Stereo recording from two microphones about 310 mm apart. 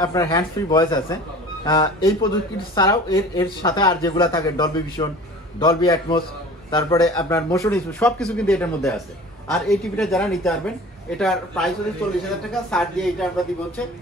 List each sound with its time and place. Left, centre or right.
0.0 s a man's voice: centre
12.7 s a woman's voice: centre